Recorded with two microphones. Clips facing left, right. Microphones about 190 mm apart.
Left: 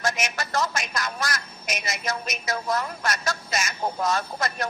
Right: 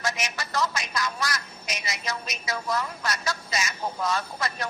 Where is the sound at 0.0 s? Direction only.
50° left (ahead or behind).